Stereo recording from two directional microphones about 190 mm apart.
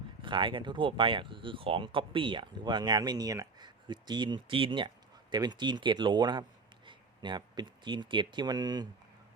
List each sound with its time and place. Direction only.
0.2 s speech: 25° right (ahead or behind)